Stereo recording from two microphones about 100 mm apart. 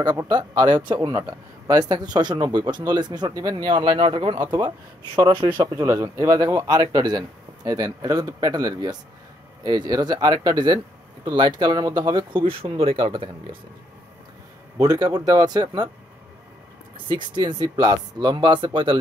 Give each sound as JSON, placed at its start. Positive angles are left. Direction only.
{"t": 0.3, "sound": "a man's voice", "side_deg": -50}
{"t": 4.5, "sound": "a man's voice", "side_deg": -45}
{"t": 5.9, "sound": "a man's voice", "side_deg": -35}
{"t": 14.8, "sound": "speech", "side_deg": -40}
{"t": 16.9, "sound": "a man's voice", "side_deg": -50}